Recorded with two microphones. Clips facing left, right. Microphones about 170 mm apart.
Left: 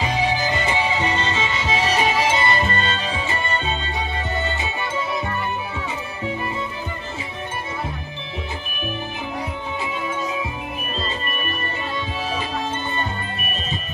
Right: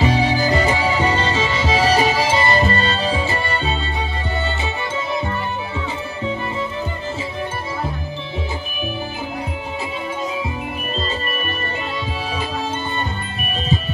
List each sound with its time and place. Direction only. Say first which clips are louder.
0.0 s music: right 4 dB; 35° right (ahead or behind)